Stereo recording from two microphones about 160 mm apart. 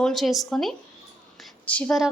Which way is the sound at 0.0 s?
Centre (ahead or behind).